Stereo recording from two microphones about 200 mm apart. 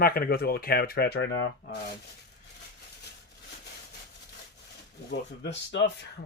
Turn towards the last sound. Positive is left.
turn(degrees=60)  # may be behind; listen again after turning